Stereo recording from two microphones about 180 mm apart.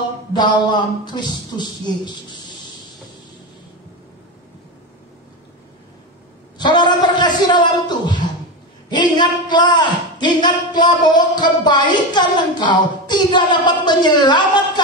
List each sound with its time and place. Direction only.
0.3 s speech: 25° left (ahead or behind)
6.6 s a sound: 25° left (ahead or behind)
8.9 s speech: 25° left (ahead or behind)